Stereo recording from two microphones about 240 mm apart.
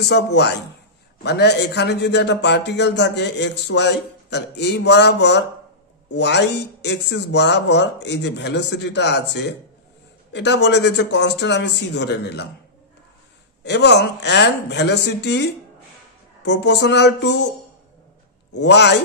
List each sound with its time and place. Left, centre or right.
0.0 s a man's voice: left
13.7 s a man's voice: left
18.5 s a man's voice: left